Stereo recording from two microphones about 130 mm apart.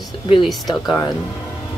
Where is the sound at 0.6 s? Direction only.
30° left (ahead or behind).